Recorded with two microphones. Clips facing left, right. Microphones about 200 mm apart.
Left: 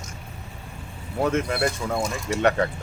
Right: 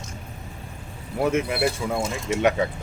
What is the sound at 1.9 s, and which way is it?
Speech, 25° right (ahead or behind).